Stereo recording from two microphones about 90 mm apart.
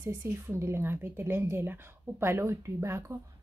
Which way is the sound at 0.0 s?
25° right (ahead or behind).